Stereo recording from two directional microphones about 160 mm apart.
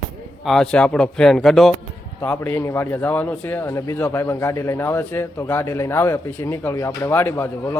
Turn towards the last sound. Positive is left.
turn(degrees=15)  # may be behind; listen again after turning